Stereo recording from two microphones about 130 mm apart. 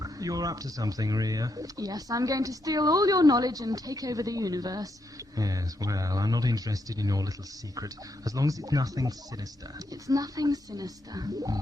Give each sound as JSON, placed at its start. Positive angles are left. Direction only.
{"t": 0.0, "sound": "speech", "side_deg": -25}